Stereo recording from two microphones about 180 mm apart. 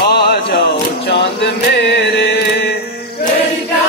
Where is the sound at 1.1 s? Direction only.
70° left (ahead or behind).